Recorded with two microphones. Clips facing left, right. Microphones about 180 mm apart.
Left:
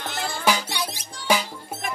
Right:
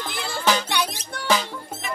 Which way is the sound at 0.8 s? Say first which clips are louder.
Right 4 dB; 70° right (ahead or behind).